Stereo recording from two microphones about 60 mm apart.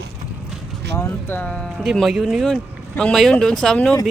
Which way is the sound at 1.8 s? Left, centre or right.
Centre.